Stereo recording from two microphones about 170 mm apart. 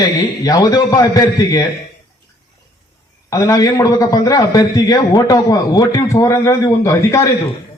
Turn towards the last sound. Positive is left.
turn(degrees=15)  # may be behind; listen again after turning